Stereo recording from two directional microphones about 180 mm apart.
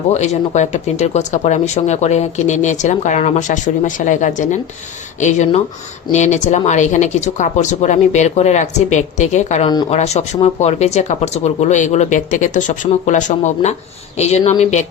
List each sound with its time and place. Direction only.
0.1 s speech: 40° left (ahead or behind)